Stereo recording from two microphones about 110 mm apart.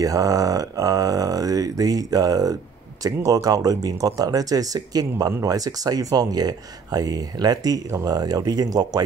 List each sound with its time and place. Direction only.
0.0 s speech: 30° right (ahead or behind)